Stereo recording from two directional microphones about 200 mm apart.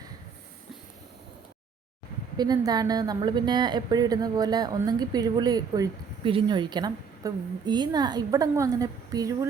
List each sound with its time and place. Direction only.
2.4 s a woman's voice: 20° right (ahead or behind)